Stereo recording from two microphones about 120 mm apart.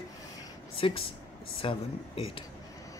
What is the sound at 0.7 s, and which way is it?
A man's voice, 50° left (ahead or behind).